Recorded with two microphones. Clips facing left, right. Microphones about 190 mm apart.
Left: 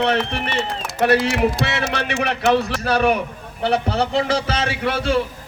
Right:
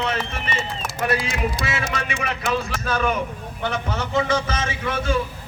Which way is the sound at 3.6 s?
35° left (ahead or behind).